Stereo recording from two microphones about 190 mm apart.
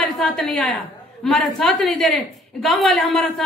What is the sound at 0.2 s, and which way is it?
A woman's voice, 5° left (ahead or behind).